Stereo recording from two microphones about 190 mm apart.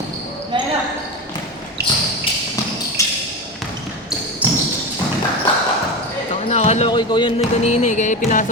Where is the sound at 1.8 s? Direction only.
60° right (ahead or behind).